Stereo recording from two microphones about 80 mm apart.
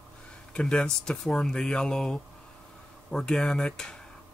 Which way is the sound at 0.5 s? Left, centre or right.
Centre.